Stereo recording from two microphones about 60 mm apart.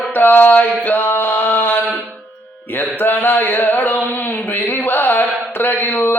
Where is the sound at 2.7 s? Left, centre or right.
Left.